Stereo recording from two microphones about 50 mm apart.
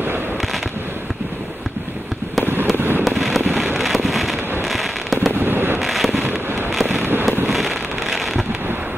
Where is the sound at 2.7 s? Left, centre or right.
Right.